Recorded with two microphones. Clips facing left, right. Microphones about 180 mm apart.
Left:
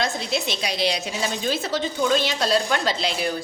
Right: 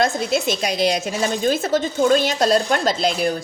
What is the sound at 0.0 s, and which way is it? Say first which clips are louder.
A woman's voice: right 6 dB; 50° right (ahead or behind).